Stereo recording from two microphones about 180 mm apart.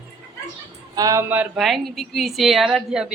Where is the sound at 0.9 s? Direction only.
20° right (ahead or behind).